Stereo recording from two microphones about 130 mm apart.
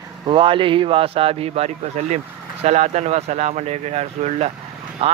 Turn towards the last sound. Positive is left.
turn(degrees=-45)  # may be behind; listen again after turning